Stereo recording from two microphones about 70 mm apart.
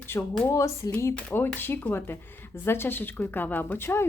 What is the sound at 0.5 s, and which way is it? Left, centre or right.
Speech, left.